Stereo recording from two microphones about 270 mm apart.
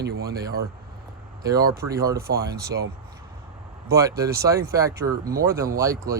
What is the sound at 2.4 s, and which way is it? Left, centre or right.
Speech, right.